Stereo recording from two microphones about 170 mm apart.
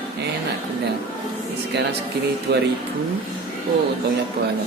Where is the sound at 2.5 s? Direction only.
75° right (ahead or behind).